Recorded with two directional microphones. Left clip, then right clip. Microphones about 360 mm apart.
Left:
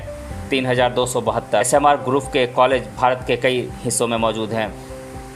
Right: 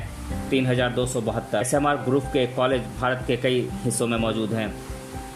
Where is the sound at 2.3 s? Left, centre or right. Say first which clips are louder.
Left 9 dB; centre.